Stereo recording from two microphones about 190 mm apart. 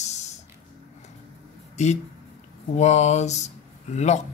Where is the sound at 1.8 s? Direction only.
35° left (ahead or behind).